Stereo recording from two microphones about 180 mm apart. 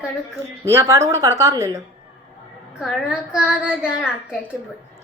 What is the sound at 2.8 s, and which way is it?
A child's voice, 5° right (ahead or behind).